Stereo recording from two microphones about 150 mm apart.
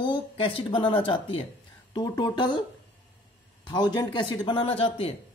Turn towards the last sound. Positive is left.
turn(degrees=40)  # may be behind; listen again after turning